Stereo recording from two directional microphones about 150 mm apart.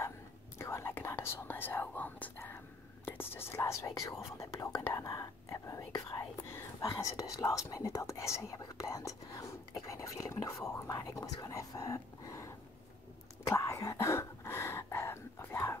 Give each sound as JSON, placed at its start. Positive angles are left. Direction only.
{"t": 0.6, "sound": "whispering", "side_deg": 15}
{"t": 3.1, "sound": "speech", "side_deg": 15}
{"t": 13.4, "sound": "whispering", "side_deg": 20}